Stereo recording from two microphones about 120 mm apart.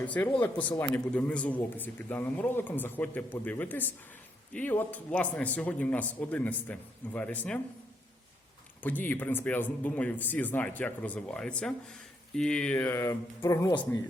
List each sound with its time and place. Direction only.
0.0 s a man's voice: 10° left (ahead or behind)
8.8 s a man's voice: 15° left (ahead or behind)
13.7 s speech: 40° left (ahead or behind)